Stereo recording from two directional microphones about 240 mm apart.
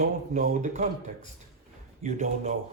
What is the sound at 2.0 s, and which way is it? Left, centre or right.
Speech, right.